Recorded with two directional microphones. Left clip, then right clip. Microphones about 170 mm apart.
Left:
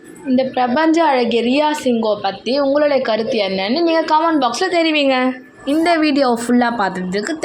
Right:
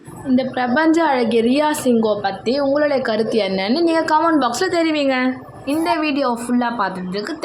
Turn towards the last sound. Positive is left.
turn(degrees=20)  # may be behind; listen again after turning